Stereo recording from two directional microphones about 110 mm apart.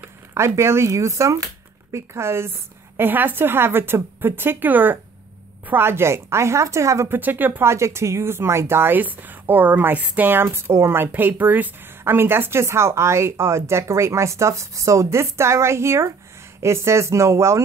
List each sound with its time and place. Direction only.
0.0 s speech: 25° right (ahead or behind)
7.2 s speech: 15° right (ahead or behind)